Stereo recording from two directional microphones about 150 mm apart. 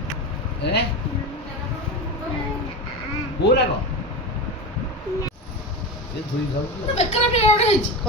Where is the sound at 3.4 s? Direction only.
90° left.